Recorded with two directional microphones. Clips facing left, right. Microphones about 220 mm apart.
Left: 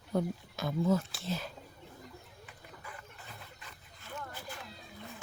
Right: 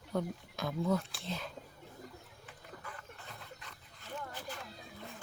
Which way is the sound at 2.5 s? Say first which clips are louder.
Right 2 dB; 10° left (ahead or behind).